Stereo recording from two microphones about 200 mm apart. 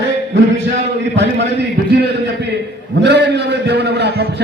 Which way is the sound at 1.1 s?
60° right (ahead or behind).